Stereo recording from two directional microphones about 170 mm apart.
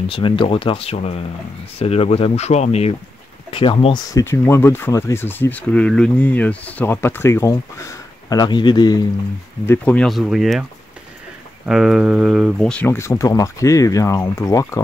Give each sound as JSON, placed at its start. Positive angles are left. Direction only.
{"t": 0.1, "sound": "speech", "side_deg": 30}
{"t": 9.7, "sound": "speech", "side_deg": 10}
{"t": 11.6, "sound": "speech", "side_deg": 0}
{"t": 12.8, "sound": "speech", "side_deg": 15}